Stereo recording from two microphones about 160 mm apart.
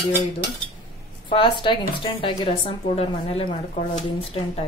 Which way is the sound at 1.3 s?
30° left (ahead or behind).